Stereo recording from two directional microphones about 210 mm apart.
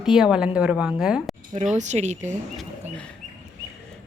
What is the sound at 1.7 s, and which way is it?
Speech, 35° right (ahead or behind).